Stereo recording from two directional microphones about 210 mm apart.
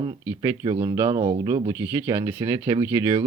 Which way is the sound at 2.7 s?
25° right (ahead or behind).